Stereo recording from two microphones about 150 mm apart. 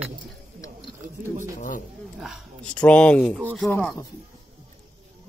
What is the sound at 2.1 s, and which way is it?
Speech, 5° right (ahead or behind).